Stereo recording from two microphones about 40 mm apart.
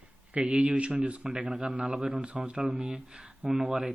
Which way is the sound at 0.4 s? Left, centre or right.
Right.